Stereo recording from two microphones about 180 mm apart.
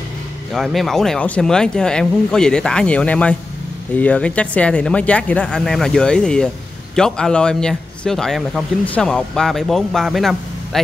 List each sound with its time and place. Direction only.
0.5 s speech: centre (ahead or behind)